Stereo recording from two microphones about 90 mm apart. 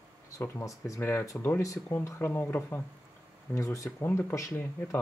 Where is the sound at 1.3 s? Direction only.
20° left (ahead or behind).